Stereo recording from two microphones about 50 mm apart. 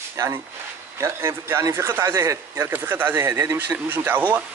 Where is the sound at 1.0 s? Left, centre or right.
Right.